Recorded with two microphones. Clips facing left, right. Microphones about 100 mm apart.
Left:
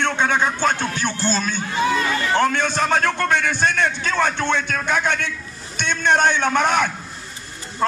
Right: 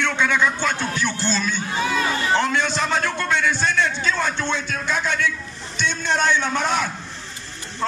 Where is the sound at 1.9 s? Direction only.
25° right (ahead or behind).